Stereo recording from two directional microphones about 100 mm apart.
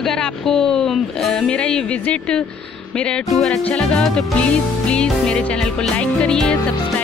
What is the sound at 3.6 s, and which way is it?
Music, 10° left (ahead or behind).